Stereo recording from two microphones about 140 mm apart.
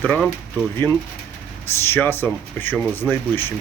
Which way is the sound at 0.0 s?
10° left (ahead or behind).